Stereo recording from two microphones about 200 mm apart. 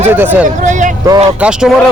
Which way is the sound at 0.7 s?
40° right (ahead or behind).